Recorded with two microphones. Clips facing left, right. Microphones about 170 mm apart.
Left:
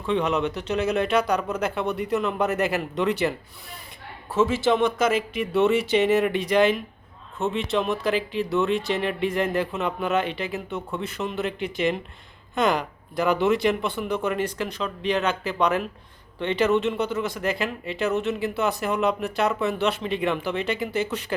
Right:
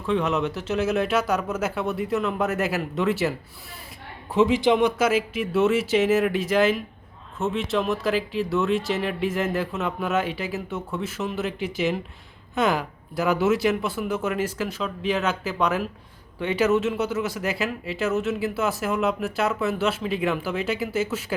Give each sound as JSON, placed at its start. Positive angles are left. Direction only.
{"t": 0.0, "sound": "speech", "side_deg": 0}
{"t": 4.4, "sound": "speech", "side_deg": -15}